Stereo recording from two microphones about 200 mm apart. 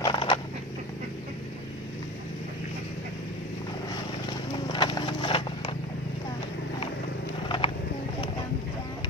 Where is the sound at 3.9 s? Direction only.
20° left (ahead or behind).